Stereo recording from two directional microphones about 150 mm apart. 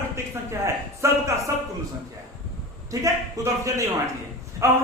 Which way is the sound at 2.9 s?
20° right (ahead or behind).